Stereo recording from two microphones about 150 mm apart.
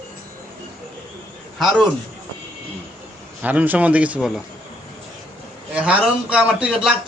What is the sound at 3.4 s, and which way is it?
A man's voice, 10° right (ahead or behind).